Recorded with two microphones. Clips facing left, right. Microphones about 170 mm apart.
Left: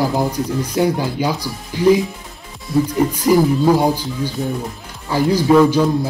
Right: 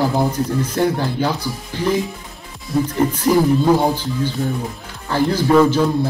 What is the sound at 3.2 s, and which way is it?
Speech, 10° left (ahead or behind).